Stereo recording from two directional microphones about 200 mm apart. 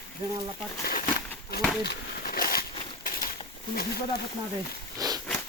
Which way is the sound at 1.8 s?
50° left (ahead or behind).